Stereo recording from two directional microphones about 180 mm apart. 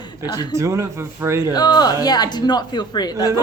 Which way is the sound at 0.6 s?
15° right (ahead or behind).